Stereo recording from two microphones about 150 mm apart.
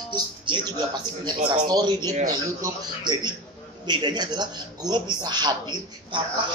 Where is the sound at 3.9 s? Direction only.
30° right (ahead or behind).